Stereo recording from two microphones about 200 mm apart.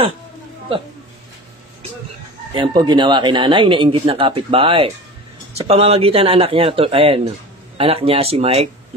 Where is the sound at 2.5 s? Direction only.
25° right (ahead or behind).